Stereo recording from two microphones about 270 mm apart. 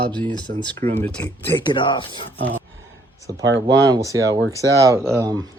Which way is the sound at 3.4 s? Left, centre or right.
Right.